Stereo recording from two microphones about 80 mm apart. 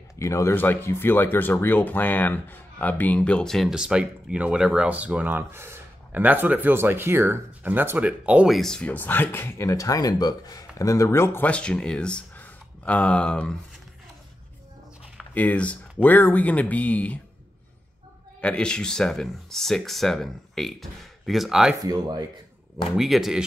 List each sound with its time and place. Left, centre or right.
0.2 s speech: left
0.6 s speech: left
3.5 s speech: centre
3.8 s speech: centre
8.5 s speech: centre
8.8 s speech: left
11.4 s speech: centre
15.3 s speech: centre
18.4 s speech: centre
21.8 s speech: right
22.9 s speech: centre